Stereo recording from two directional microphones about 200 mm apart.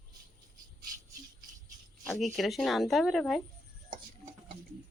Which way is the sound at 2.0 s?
Centre (ahead or behind).